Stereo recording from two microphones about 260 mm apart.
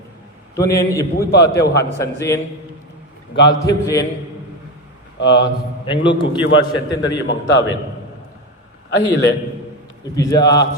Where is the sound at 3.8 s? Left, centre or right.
Centre.